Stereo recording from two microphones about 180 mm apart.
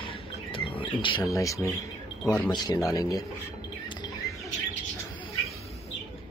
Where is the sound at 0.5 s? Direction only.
30° left (ahead or behind).